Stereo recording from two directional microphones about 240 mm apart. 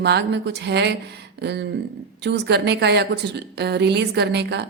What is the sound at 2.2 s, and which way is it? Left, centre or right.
A woman's voice, right.